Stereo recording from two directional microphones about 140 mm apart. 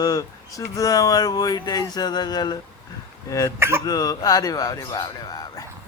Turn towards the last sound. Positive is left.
turn(degrees=30)  # may be behind; listen again after turning